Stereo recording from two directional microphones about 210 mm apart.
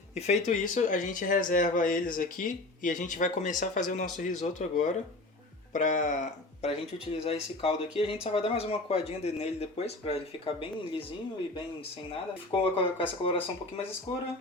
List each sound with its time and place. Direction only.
0.1 s speech: 30° left (ahead or behind)
13.0 s speech: 25° left (ahead or behind)